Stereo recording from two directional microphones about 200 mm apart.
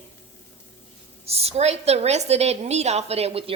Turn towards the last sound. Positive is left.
turn(degrees=-30)  # may be behind; listen again after turning